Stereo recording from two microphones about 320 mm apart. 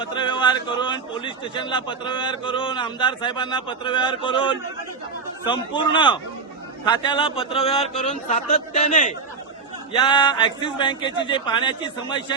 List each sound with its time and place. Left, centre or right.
0.0 s a man's voice: centre